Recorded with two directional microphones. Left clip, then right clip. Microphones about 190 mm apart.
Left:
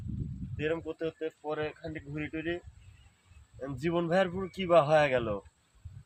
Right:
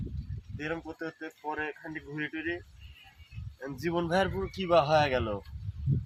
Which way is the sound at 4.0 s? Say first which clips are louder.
Even; 30° left (ahead or behind).